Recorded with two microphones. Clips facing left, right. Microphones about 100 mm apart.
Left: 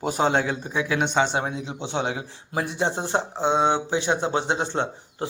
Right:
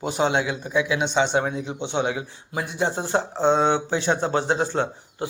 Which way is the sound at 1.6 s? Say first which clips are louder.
Right 2 dB; 35° left (ahead or behind).